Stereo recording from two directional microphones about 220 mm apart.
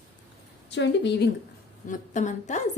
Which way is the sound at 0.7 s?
55° left (ahead or behind).